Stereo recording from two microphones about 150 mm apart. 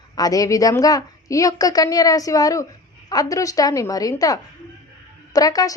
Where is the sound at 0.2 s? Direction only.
25° left (ahead or behind).